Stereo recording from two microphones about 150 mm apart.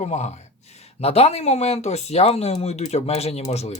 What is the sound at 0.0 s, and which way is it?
Speech, 50° left (ahead or behind).